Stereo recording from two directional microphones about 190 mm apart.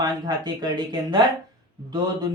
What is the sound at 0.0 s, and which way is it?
Speech, 20° right (ahead or behind).